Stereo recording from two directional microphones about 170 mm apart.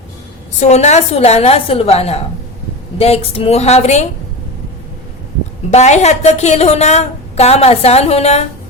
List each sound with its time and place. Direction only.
0.6 s a woman's voice: 40° left (ahead or behind)
5.7 s a woman's voice: 40° left (ahead or behind)